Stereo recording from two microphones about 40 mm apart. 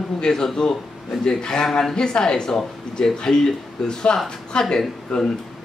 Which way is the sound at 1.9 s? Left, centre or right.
Centre.